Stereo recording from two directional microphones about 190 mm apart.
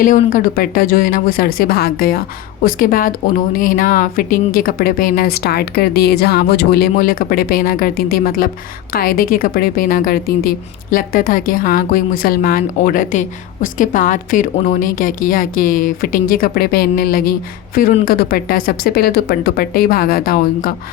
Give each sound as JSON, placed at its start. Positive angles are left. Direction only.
{"t": 0.0, "sound": "a woman's voice", "side_deg": 45}